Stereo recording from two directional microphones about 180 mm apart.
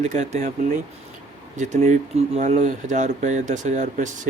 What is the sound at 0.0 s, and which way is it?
Speech, 40° right (ahead or behind).